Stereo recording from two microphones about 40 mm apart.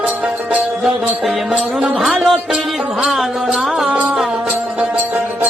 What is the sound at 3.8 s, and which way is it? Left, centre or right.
Music, right.